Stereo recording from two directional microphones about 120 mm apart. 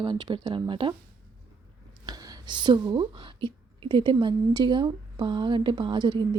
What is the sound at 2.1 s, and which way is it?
Speech, 40° right (ahead or behind).